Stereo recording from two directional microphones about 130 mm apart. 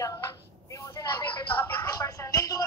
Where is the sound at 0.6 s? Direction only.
25° left (ahead or behind).